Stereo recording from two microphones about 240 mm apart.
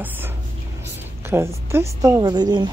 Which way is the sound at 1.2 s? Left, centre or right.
Centre.